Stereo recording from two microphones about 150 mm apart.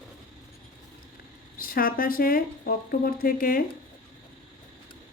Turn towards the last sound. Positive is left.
turn(degrees=75)  # may be behind; listen again after turning